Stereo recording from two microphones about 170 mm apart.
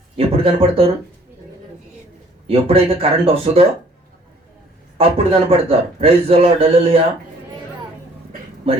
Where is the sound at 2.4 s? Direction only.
35° right (ahead or behind).